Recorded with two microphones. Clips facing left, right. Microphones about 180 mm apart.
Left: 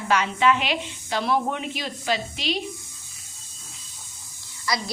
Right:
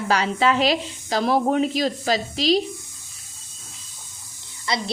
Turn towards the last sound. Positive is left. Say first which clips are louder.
# right 2 dB
turn(degrees=-25)  # may be behind; listen again after turning